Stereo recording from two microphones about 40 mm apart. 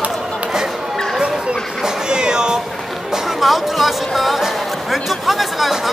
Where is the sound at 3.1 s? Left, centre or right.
Centre.